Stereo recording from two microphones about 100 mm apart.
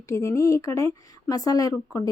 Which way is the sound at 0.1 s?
30° left (ahead or behind).